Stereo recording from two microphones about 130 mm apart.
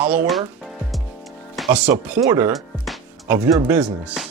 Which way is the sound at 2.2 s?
20° right (ahead or behind).